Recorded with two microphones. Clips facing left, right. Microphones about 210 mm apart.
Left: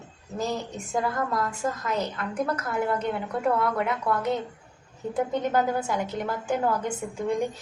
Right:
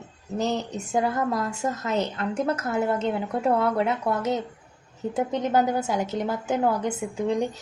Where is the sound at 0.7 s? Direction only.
25° right (ahead or behind).